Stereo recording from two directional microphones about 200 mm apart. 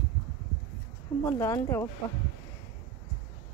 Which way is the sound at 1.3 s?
15° left (ahead or behind).